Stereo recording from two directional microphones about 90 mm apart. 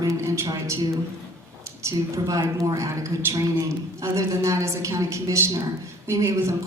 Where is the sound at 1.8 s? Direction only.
40° right (ahead or behind).